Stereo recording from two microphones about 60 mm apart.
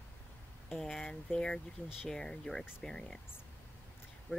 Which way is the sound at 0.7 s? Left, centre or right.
Centre.